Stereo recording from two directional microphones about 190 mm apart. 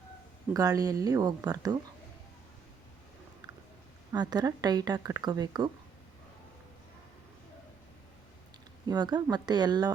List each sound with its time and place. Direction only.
0.5 s speech: 20° right (ahead or behind)
4.1 s speech: 20° right (ahead or behind)
8.9 s speech: 20° right (ahead or behind)